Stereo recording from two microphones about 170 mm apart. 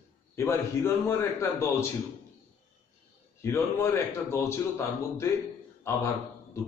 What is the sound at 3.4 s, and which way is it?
A man's voice, 15° left (ahead or behind).